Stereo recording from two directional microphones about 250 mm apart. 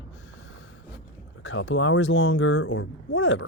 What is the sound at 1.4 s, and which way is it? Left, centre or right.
Speech, left.